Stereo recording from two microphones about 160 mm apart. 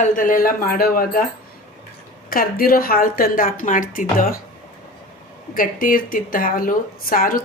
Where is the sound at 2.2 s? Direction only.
65° left (ahead or behind).